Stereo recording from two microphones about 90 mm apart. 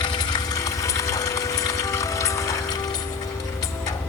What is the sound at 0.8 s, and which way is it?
Pump, 35° left (ahead or behind).